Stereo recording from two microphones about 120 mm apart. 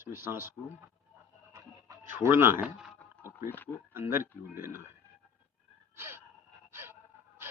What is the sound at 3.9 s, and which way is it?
Speech, 20° right (ahead or behind).